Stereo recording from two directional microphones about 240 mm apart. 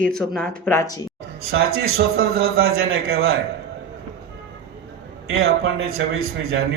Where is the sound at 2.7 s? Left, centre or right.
Right.